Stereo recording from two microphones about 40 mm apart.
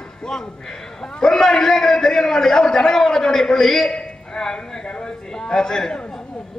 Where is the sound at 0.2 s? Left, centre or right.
Centre.